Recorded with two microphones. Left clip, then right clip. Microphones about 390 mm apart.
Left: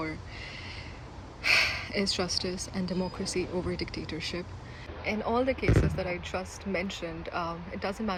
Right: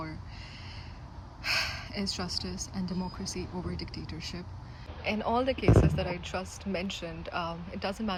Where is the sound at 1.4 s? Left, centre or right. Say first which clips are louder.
Left 6 dB; centre.